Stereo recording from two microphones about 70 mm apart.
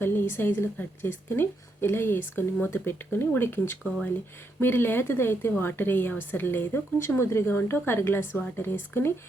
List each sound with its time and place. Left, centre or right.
0.0 s a woman's voice: left